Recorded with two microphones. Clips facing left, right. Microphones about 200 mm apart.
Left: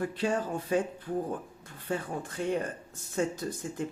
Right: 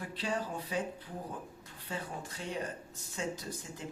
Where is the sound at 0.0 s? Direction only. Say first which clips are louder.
Left 7 dB; 50° left (ahead or behind).